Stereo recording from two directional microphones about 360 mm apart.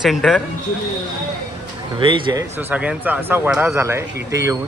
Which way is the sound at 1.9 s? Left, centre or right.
Centre.